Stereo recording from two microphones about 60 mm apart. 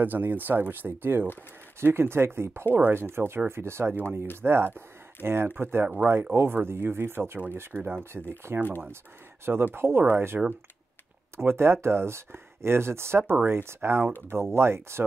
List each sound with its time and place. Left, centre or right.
0.0 s speech: right